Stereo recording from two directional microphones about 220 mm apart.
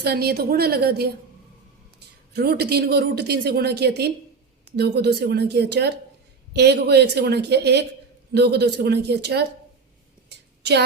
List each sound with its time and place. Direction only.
0.0 s speech: 45° right (ahead or behind)
2.3 s speech: 45° right (ahead or behind)
10.2 s a sound: 50° right (ahead or behind)